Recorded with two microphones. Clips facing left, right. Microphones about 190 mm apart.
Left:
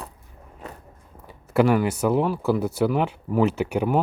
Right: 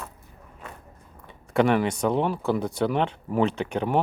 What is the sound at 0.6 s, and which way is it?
Biting, 35° left (ahead or behind).